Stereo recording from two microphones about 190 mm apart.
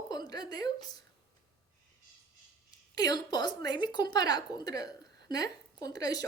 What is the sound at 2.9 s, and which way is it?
A woman's voice, 20° left (ahead or behind).